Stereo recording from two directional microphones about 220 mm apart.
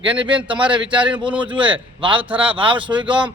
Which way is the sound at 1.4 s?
20° right (ahead or behind).